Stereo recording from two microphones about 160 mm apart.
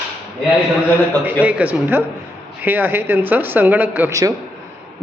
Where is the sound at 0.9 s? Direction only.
10° right (ahead or behind).